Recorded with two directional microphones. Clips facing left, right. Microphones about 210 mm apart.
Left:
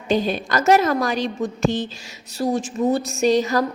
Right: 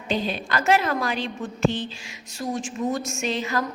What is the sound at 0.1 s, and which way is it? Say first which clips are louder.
A woman's voice: left 5 dB; 45° left (ahead or behind).